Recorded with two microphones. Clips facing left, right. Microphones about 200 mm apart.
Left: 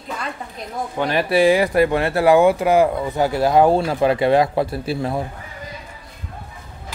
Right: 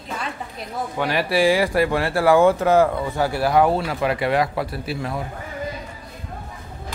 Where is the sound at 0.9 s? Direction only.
20° left (ahead or behind).